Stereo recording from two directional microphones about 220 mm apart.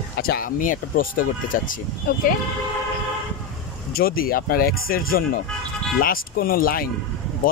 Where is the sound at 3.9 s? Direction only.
40° left (ahead or behind).